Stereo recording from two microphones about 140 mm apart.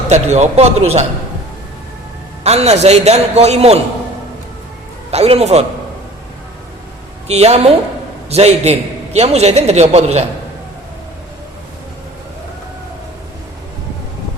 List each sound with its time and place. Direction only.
0.1 s a man's voice: 55° right (ahead or behind)
2.4 s a man's voice: 50° right (ahead or behind)
5.1 s a man's voice: 50° right (ahead or behind)
7.3 s a man's voice: 50° right (ahead or behind)